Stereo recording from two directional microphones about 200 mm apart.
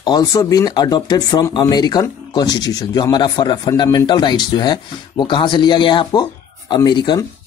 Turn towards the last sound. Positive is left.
turn(degrees=20)  # may be behind; listen again after turning